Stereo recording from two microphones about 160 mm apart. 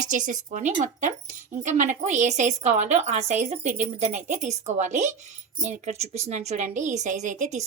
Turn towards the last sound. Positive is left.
turn(degrees=-50)  # may be behind; listen again after turning